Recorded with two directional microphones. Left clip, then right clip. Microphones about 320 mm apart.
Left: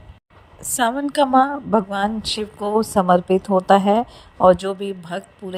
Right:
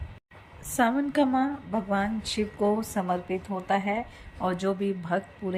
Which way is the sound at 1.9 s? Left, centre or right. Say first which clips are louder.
Left 6 dB; centre.